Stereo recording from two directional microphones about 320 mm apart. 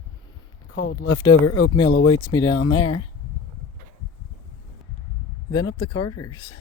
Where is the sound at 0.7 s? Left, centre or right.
Left.